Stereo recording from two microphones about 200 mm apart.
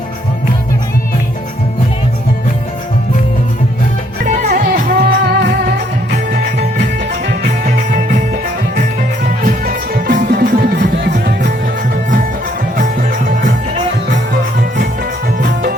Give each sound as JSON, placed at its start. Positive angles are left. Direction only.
{"t": 4.3, "sound": "music", "side_deg": -40}
{"t": 9.4, "sound": "music", "side_deg": -45}
{"t": 10.9, "sound": "music", "side_deg": -60}
{"t": 12.7, "sound": "music", "side_deg": -40}